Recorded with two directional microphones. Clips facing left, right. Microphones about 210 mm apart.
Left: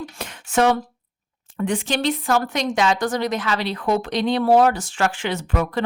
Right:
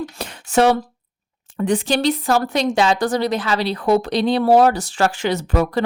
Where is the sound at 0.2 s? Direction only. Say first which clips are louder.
Right 3 dB; 35° right (ahead or behind).